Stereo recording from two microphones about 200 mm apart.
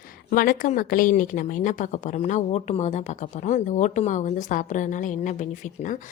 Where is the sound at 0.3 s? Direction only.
45° left (ahead or behind).